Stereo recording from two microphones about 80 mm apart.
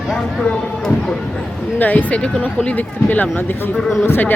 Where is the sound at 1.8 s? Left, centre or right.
Left.